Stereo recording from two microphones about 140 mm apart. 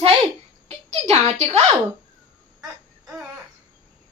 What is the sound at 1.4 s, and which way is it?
Speech, 50° right (ahead or behind).